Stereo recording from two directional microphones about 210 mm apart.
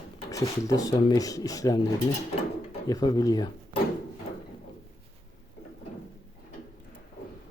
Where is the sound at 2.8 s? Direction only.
15° left (ahead or behind).